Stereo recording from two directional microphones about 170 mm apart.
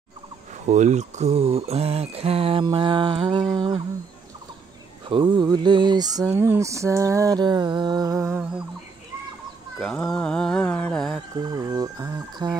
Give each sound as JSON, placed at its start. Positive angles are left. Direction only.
{"t": 0.7, "sound": "a sound", "side_deg": -45}
{"t": 5.1, "sound": "speech", "side_deg": -25}
{"t": 9.8, "sound": "speech", "side_deg": 5}
{"t": 11.4, "sound": "speech", "side_deg": -25}